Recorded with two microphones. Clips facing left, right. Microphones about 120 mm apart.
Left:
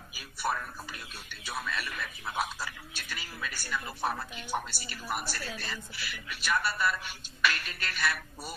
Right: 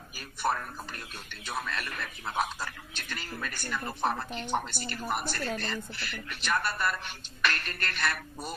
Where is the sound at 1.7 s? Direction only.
5° left (ahead or behind).